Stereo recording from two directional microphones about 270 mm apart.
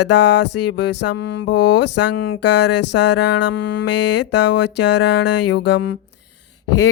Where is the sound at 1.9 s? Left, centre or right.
Left.